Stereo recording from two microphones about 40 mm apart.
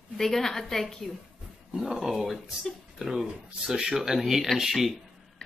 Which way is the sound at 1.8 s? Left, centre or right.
Centre.